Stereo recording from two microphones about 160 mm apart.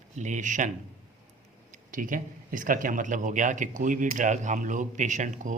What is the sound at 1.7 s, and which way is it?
Speech, 55° right (ahead or behind).